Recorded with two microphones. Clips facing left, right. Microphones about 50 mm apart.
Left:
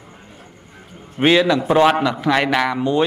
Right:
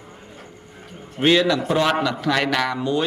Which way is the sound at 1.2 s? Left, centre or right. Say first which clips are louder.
Left 3 dB; centre.